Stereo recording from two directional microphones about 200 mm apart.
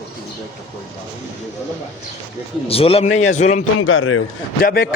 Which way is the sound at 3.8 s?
90° left.